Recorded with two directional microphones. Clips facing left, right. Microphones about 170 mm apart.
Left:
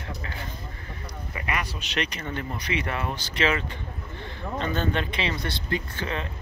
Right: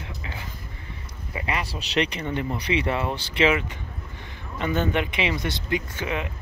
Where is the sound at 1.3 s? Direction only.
25° right (ahead or behind).